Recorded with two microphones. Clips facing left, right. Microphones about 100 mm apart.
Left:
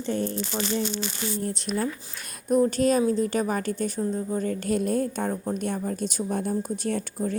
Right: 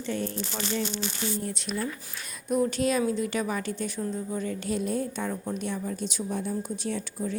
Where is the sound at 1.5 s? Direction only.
40° left (ahead or behind).